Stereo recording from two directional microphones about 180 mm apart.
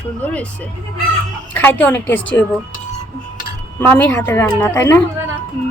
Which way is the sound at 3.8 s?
10° left (ahead or behind).